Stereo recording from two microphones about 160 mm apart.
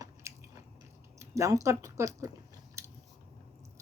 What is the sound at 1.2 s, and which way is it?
Speech, 20° right (ahead or behind).